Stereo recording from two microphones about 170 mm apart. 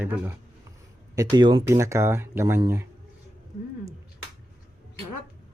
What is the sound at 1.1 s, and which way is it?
Speech, 20° right (ahead or behind).